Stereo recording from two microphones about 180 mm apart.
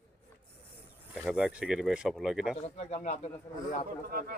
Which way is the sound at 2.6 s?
40° left (ahead or behind).